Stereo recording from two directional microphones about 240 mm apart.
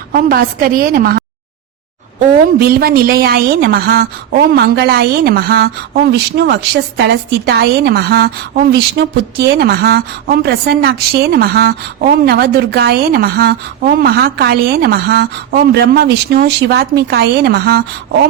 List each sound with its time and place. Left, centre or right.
0.1 s a woman's voice: right